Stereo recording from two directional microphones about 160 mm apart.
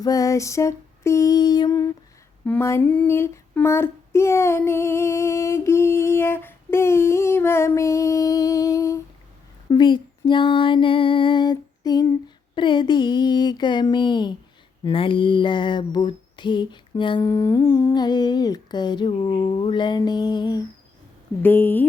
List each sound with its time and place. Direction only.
0.0 s lullaby: 20° left (ahead or behind)
2.5 s female singing: 15° left (ahead or behind)
9.6 s a sound: 30° left (ahead or behind)
12.5 s humming: 30° left (ahead or behind)
14.8 s a sound: 30° left (ahead or behind)
15.9 s humming: 30° left (ahead or behind)
21.4 s female singing: 10° left (ahead or behind)